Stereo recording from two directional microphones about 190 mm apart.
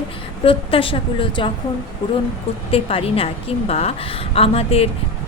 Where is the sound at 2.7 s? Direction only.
30° left (ahead or behind).